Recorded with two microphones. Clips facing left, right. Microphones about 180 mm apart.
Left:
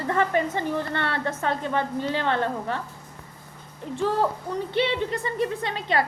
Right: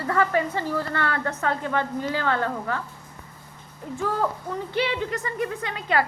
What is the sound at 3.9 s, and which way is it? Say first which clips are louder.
A woman's voice: left 2 dB; 25° left (ahead or behind).